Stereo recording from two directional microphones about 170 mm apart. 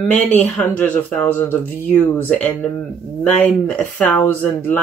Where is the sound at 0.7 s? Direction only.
10° left (ahead or behind).